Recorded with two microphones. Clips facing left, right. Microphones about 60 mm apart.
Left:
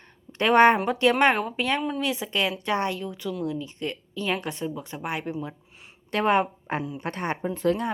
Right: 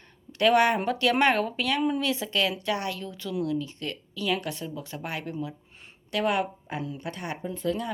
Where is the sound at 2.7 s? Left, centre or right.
Left.